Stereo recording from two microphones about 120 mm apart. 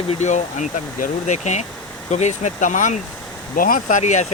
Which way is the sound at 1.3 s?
75° left (ahead or behind).